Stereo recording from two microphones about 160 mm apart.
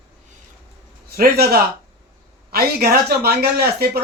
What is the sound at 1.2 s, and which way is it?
Speech, 75° right (ahead or behind).